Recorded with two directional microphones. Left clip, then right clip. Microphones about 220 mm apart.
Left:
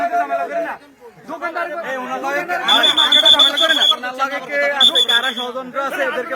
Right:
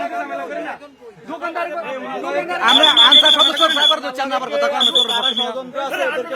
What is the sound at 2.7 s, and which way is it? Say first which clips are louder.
Speech: right 3 dB; 50° right (ahead or behind).